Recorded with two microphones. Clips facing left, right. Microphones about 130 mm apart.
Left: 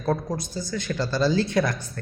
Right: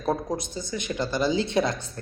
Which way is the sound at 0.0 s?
20° right (ahead or behind).